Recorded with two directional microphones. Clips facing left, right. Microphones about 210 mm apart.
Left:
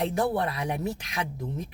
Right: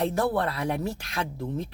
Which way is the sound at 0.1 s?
20° left (ahead or behind).